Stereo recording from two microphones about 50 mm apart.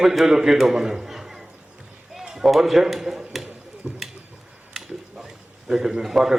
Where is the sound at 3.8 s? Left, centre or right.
Centre.